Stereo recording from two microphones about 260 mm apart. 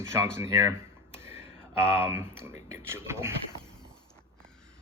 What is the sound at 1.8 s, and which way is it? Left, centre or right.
Speech, centre.